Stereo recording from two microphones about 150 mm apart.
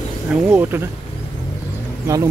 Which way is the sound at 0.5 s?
15° right (ahead or behind).